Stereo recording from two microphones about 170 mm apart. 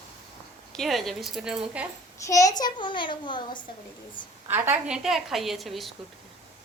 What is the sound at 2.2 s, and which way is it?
A child's voice, 20° left (ahead or behind).